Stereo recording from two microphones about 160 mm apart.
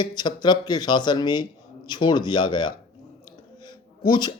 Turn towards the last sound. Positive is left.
turn(degrees=30)  # may be behind; listen again after turning